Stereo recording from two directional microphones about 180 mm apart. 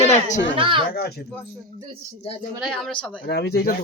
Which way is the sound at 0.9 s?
60° left (ahead or behind).